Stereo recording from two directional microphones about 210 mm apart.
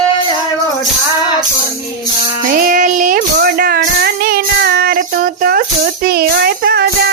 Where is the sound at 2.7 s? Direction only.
40° right (ahead or behind).